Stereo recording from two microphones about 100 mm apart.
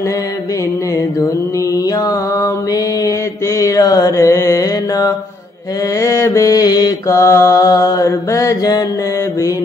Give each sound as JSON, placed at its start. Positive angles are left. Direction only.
{"t": 2.0, "sound": "mantra", "side_deg": 35}